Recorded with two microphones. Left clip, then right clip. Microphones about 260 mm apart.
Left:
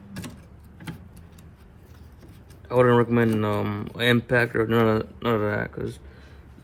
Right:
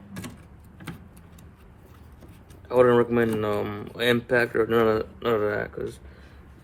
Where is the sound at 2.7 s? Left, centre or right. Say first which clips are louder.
Even; left.